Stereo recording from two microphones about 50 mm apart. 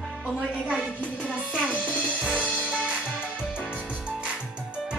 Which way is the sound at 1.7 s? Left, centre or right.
Right.